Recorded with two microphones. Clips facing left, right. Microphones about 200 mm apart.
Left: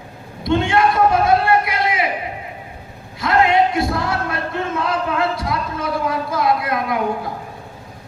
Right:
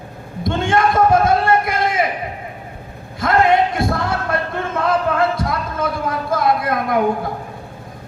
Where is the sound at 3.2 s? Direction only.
50° right (ahead or behind).